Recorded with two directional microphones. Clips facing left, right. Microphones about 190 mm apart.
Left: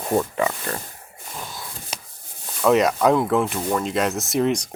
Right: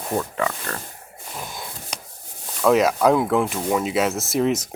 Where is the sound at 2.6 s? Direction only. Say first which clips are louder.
Even; centre (ahead or behind).